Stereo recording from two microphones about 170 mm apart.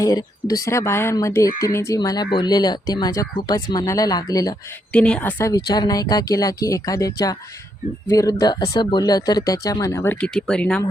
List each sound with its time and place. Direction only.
0.0 s speech: 20° left (ahead or behind)
4.9 s speech: 5° left (ahead or behind)